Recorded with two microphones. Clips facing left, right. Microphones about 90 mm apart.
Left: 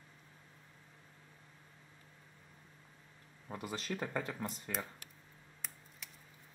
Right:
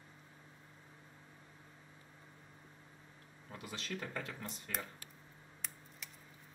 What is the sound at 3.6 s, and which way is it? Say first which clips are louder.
Speech: left 4 dB; 40° left (ahead or behind).